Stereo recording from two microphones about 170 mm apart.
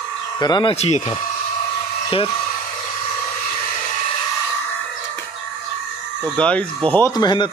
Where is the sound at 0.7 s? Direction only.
40° left (ahead or behind).